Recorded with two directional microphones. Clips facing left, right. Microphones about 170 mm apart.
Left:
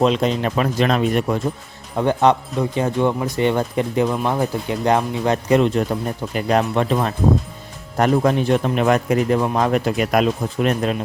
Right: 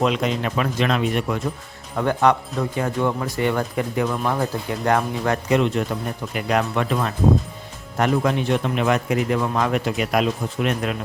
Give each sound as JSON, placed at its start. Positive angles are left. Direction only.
{"t": 0.0, "sound": "a man's voice", "side_deg": 30}
{"t": 2.0, "sound": "speech", "side_deg": 20}
{"t": 5.5, "sound": "a man's voice", "side_deg": 35}
{"t": 7.9, "sound": "a man's voice", "side_deg": 40}